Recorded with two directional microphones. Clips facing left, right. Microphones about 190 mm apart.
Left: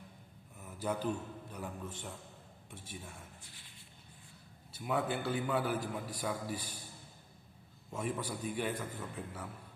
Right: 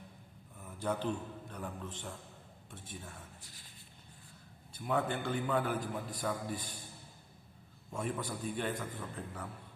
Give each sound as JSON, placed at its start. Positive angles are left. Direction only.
{"t": 0.6, "sound": "a sound", "side_deg": 10}
{"t": 1.5, "sound": "a man's voice", "side_deg": 10}
{"t": 3.4, "sound": "speech", "side_deg": -40}
{"t": 4.8, "sound": "a man's voice", "side_deg": 5}
{"t": 7.9, "sound": "a man's voice", "side_deg": 10}